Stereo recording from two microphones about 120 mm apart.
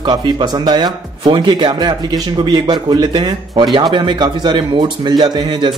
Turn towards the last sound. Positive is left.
turn(degrees=-40)  # may be behind; listen again after turning